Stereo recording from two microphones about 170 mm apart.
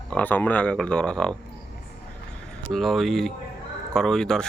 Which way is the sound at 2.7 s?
Centre (ahead or behind).